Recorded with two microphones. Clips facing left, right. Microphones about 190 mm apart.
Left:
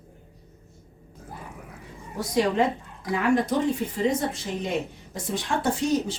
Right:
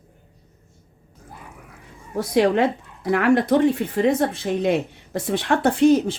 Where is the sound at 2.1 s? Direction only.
65° right (ahead or behind).